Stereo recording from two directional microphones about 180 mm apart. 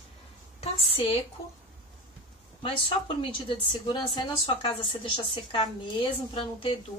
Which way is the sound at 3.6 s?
25° left (ahead or behind).